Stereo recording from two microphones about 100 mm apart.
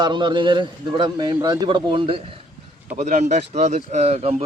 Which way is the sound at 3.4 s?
90° right.